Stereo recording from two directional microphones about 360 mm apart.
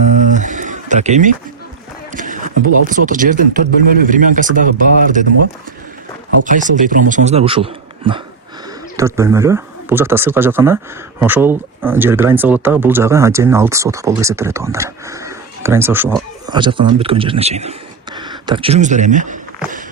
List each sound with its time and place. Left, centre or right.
0.0 s a sound: centre
3.1 s speech: right
6.4 s speech: right